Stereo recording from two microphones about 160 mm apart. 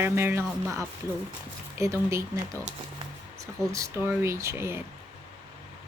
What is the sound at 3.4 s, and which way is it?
Speech, 20° right (ahead or behind).